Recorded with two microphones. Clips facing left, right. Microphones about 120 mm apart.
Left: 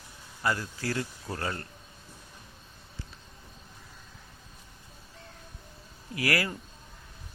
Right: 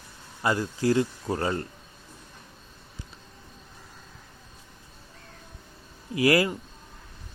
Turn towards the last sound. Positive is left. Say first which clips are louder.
# right 8 dB
turn(degrees=-20)  # may be behind; listen again after turning